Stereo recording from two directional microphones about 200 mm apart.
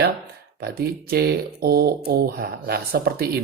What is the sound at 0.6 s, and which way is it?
Speech, 50° right (ahead or behind).